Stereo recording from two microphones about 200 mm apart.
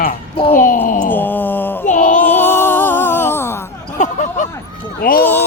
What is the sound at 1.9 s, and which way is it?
Music, 40° left (ahead or behind).